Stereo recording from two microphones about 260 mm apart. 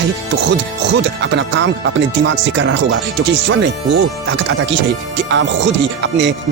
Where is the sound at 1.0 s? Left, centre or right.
Right.